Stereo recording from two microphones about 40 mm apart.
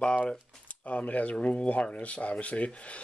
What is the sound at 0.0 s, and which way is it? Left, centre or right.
Speech, left.